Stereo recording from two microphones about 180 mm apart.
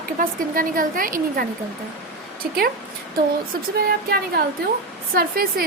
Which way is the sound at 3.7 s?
60° right (ahead or behind).